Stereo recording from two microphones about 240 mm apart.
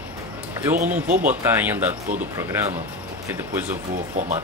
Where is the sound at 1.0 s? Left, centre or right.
Right.